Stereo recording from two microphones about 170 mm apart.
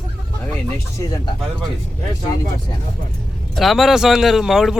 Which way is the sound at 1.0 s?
20° left (ahead or behind).